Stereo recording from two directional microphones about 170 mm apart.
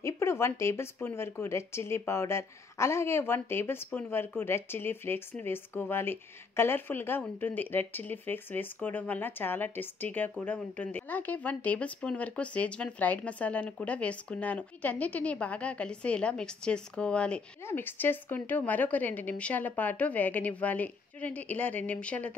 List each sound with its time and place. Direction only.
0.0 s speech: 15° left (ahead or behind)